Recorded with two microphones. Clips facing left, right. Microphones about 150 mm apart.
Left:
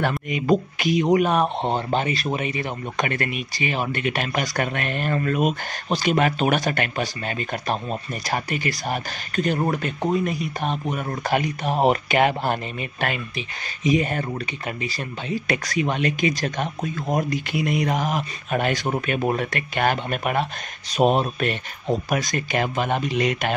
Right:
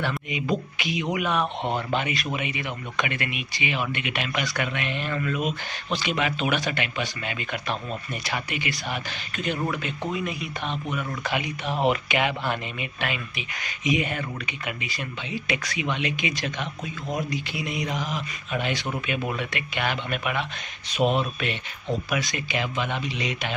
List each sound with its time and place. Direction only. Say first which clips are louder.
0.3 s speech: left 6 dB; 45° left (ahead or behind)